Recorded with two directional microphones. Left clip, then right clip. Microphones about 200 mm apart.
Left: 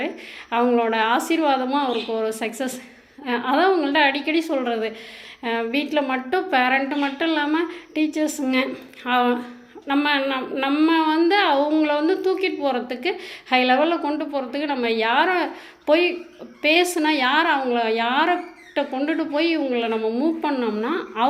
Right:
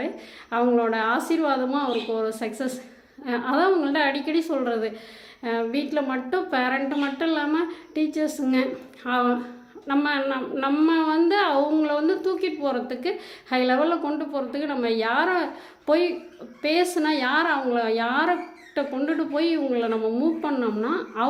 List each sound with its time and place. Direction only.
0.5 s a woman's voice: centre (ahead or behind)